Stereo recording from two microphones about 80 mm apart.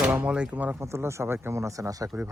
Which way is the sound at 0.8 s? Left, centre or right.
Right.